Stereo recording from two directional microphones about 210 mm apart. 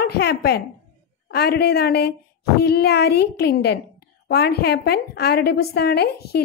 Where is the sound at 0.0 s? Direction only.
50° left (ahead or behind).